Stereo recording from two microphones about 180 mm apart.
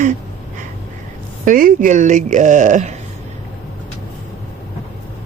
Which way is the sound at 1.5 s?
50° right (ahead or behind).